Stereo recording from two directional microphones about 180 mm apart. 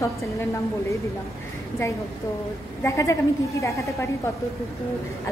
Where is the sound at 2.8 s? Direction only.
15° left (ahead or behind).